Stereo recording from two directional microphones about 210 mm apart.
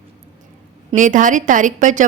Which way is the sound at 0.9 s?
35° right (ahead or behind).